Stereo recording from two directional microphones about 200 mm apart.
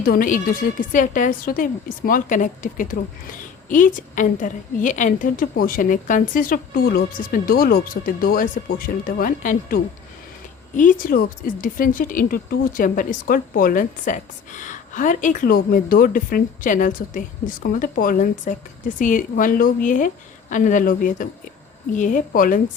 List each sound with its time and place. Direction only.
0.0 s a woman's voice: 45° left (ahead or behind)